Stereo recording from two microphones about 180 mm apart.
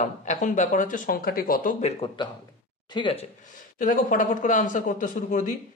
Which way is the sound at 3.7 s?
50° left (ahead or behind).